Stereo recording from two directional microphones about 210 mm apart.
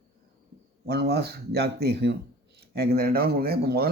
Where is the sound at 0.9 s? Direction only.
50° right (ahead or behind).